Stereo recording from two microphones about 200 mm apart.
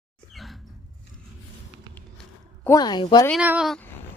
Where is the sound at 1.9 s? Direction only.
10° left (ahead or behind).